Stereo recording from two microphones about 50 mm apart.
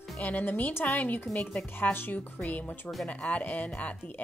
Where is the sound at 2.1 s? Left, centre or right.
Left.